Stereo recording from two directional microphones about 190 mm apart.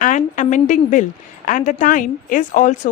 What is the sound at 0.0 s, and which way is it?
A woman's voice, 40° left (ahead or behind).